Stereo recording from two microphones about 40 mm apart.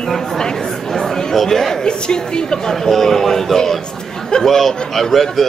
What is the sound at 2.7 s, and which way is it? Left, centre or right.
A man's voice, centre.